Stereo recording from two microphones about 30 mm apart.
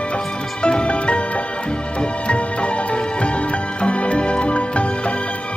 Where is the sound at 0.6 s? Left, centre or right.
Left.